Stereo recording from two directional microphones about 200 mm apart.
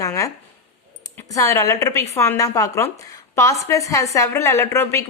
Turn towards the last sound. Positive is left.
turn(degrees=15)  # may be behind; listen again after turning